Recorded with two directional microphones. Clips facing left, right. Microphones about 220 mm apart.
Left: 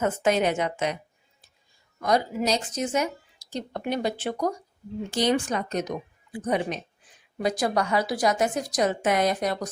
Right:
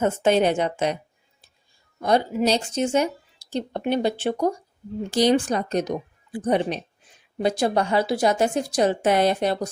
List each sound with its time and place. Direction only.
0.0 s a woman's voice: 30° right (ahead or behind)
2.0 s speech: 30° right (ahead or behind)